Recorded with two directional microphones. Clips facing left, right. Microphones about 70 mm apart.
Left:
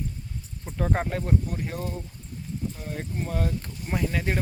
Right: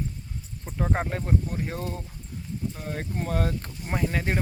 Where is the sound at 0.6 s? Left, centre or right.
Centre.